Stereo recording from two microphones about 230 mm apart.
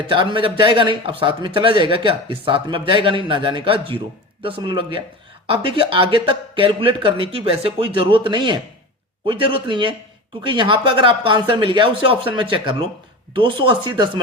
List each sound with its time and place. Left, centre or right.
0.0 s speech: right